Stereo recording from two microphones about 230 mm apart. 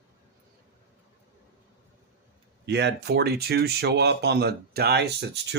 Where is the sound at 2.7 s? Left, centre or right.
Right.